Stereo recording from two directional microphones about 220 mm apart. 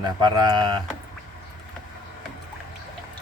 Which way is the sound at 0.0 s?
20° right (ahead or behind).